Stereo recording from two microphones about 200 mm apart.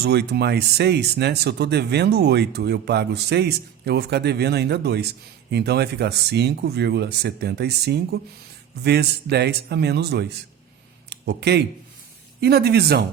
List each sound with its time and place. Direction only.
0.0 s speech: 55° right (ahead or behind)